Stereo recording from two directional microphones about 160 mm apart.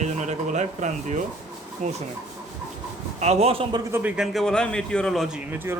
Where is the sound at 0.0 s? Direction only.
45° right (ahead or behind).